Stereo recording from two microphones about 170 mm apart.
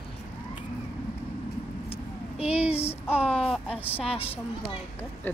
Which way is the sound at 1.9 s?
35° left (ahead or behind).